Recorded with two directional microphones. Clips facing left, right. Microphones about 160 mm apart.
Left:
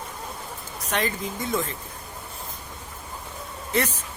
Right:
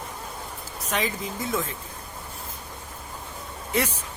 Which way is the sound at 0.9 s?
Centre (ahead or behind).